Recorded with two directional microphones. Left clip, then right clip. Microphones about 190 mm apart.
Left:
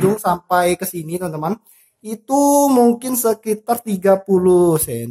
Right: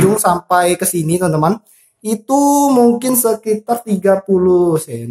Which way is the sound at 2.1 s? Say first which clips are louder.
Right 2 dB; 10° left (ahead or behind).